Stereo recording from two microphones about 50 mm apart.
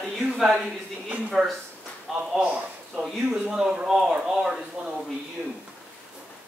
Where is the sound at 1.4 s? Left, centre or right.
Centre.